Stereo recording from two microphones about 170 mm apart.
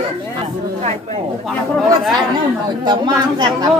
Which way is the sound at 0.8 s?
40° right (ahead or behind).